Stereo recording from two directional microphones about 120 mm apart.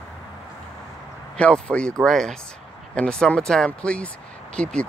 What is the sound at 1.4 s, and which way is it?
Speech, 10° left (ahead or behind).